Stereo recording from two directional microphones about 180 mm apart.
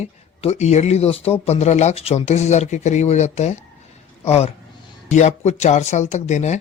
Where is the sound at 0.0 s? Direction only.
40° left (ahead or behind).